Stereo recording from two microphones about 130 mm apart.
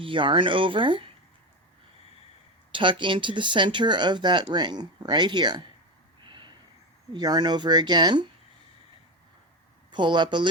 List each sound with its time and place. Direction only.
0.0 s speech: 40° right (ahead or behind)
2.7 s speech: 40° right (ahead or behind)
6.2 s a sound: 35° right (ahead or behind)
7.1 s speech: 30° right (ahead or behind)
9.9 s speech: 35° right (ahead or behind)